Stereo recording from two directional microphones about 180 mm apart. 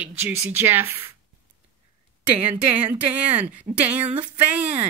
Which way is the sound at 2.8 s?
10° right (ahead or behind).